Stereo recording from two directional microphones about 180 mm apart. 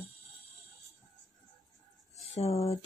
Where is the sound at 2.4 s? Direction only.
35° left (ahead or behind).